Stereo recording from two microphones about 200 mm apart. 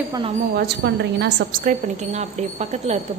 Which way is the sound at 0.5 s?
55° right (ahead or behind).